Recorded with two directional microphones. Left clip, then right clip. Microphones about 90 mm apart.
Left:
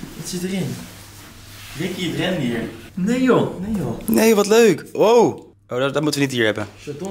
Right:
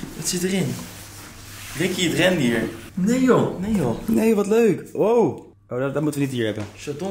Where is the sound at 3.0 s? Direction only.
10° left (ahead or behind).